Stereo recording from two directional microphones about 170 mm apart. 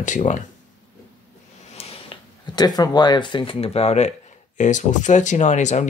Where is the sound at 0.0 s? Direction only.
45° left (ahead or behind).